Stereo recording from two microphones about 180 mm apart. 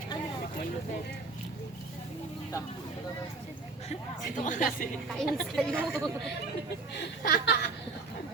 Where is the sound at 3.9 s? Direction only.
45° left (ahead or behind).